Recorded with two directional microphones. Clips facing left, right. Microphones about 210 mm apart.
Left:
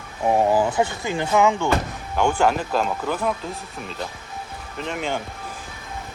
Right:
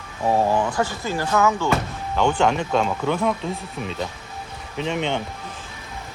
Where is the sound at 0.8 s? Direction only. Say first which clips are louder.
Left 1 dB; 20° left (ahead or behind); by 3.3 s 5° left (ahead or behind).